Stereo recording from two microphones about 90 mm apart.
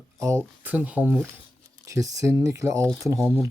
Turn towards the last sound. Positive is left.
turn(degrees=-30)  # may be behind; listen again after turning